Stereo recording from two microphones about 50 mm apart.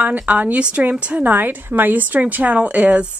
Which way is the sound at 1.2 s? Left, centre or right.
Right.